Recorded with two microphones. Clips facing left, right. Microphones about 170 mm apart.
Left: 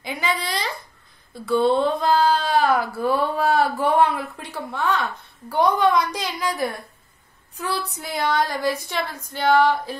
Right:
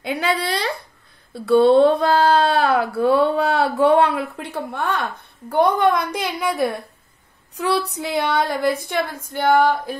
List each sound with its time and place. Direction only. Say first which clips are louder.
0.0 s speech: right 4 dB; 65° right (ahead or behind)